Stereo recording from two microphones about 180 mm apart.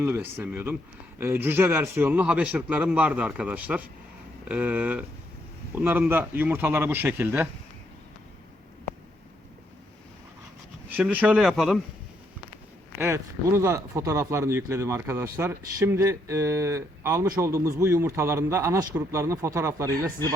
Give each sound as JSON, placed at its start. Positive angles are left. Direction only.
{"t": 0.0, "sound": "speech", "side_deg": -10}
{"t": 10.8, "sound": "speech", "side_deg": -10}
{"t": 13.0, "sound": "speech", "side_deg": -15}